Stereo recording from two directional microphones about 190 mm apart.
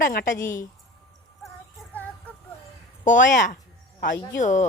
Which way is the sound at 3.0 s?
40° left (ahead or behind).